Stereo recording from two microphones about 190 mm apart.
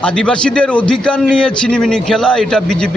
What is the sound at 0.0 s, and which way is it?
A man's voice, 5° left (ahead or behind).